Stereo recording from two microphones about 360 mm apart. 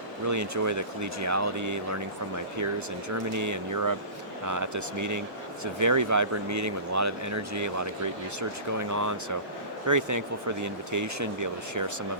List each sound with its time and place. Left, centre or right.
0.3 s speech: right
3.3 s speech: right